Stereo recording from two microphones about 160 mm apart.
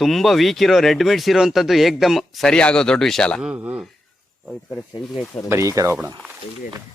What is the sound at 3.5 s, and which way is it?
Speech, 10° right (ahead or behind).